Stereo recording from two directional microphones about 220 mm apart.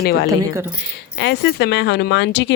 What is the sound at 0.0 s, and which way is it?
Speech, 45° left (ahead or behind).